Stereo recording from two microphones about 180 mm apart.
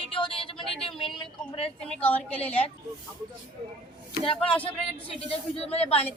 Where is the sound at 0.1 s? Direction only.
30° left (ahead or behind).